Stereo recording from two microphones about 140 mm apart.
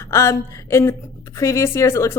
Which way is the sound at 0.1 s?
20° left (ahead or behind).